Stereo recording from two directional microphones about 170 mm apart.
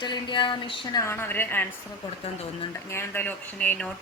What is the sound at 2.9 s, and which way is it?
Speech, 10° left (ahead or behind).